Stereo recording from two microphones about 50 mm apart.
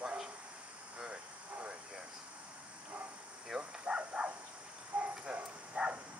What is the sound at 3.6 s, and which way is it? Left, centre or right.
Bow-wow, right.